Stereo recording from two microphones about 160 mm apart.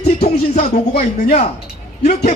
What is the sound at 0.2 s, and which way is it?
Music, 40° left (ahead or behind).